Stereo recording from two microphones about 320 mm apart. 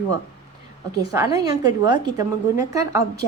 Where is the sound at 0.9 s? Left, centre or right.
Centre.